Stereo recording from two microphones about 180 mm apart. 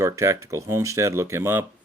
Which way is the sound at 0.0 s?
15° right (ahead or behind).